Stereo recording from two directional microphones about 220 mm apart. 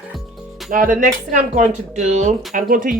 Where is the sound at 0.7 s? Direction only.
40° right (ahead or behind).